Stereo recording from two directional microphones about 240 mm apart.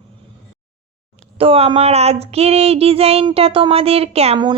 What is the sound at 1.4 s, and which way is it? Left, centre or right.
Speech, right.